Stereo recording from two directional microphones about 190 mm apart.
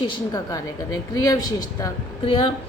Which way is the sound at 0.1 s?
20° left (ahead or behind).